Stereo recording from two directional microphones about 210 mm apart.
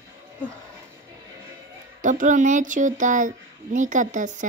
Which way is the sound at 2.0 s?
35° right (ahead or behind).